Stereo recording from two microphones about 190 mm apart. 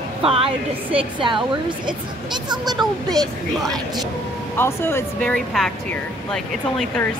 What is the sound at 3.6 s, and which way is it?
Speech, centre (ahead or behind).